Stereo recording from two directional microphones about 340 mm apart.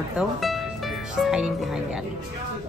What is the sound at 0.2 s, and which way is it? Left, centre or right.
Speech, centre.